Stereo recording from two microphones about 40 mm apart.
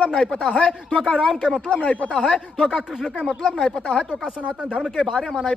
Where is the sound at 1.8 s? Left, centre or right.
Left; by 3.8 s centre.